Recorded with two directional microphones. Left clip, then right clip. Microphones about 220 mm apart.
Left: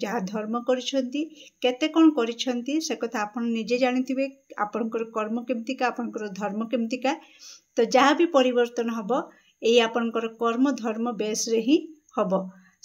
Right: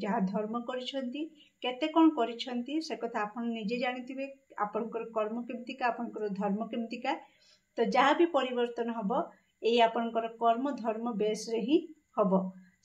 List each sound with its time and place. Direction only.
0.0 s speech: 50° left (ahead or behind)